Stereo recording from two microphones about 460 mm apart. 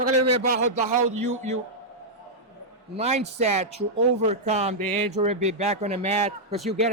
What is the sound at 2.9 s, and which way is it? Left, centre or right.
Speech, centre.